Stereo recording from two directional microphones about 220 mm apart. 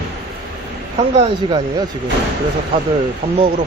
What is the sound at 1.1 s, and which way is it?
Speech, 30° right (ahead or behind).